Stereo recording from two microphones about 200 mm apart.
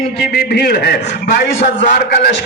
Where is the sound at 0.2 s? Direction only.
50° left (ahead or behind).